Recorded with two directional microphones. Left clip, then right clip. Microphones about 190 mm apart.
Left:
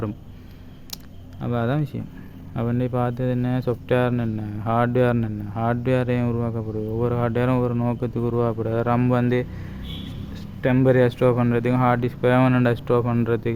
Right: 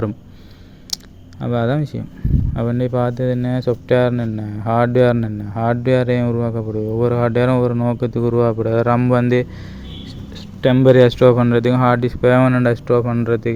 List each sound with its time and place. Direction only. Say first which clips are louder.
1.4 s speech: right 6 dB; 20° right (ahead or behind)
10.6 s speech: right 7 dB; 25° right (ahead or behind)